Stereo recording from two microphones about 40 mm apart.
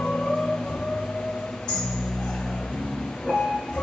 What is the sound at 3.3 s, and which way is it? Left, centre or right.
Vehicle, left.